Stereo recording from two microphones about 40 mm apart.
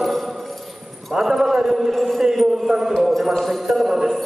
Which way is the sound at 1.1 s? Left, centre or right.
Centre.